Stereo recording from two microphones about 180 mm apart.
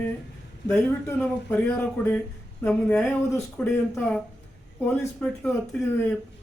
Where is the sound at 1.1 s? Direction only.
10° left (ahead or behind).